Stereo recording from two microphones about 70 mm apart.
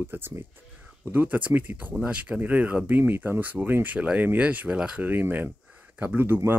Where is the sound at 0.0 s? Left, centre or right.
Right; by 5.0 s centre.